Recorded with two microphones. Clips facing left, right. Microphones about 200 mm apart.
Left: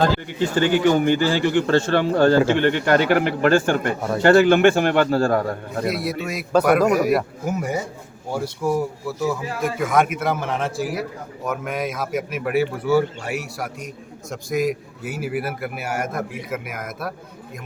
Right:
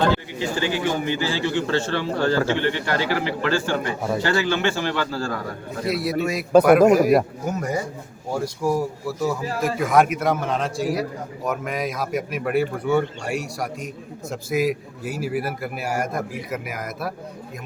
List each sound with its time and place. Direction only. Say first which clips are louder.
0.3 s a man's voice: left 5 dB; 55° left (ahead or behind)
5.8 s a man's voice: right 2 dB; centre (ahead or behind)